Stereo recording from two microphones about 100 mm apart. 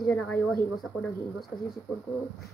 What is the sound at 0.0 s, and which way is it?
Speech, 10° left (ahead or behind).